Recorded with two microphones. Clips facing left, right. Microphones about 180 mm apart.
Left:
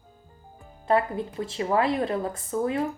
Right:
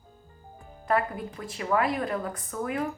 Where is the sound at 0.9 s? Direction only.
25° left (ahead or behind).